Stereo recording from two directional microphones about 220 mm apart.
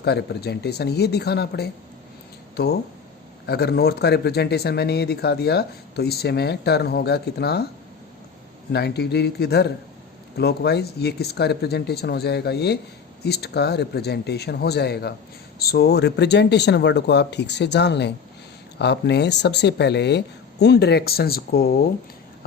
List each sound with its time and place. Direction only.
0.0 s speech: 50° left (ahead or behind)
3.4 s speech: 50° left (ahead or behind)
8.7 s speech: 50° left (ahead or behind)